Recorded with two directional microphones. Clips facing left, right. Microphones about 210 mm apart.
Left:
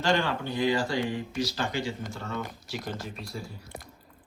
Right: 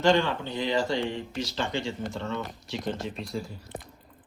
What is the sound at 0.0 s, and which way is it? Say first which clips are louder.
Speech: right 4 dB; 20° right (ahead or behind).